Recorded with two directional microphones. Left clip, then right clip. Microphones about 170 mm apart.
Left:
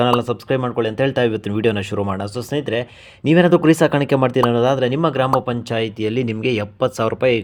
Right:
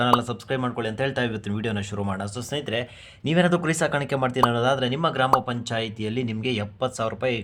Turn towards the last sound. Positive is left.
turn(degrees=40)  # may be behind; listen again after turning